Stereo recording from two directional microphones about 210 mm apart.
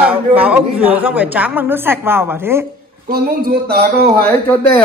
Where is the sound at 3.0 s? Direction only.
45° right (ahead or behind).